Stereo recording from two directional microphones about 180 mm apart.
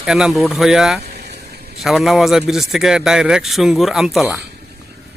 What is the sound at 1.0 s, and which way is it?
Vehicle, 65° right (ahead or behind).